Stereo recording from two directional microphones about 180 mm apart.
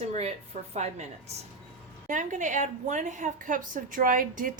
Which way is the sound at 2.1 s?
45° right (ahead or behind).